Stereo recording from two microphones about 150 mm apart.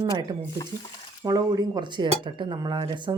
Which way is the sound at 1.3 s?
25° right (ahead or behind).